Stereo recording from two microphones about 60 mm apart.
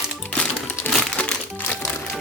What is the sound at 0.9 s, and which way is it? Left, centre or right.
Crumpling, left.